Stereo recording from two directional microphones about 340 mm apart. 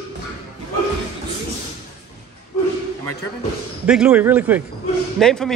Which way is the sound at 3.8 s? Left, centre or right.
Centre.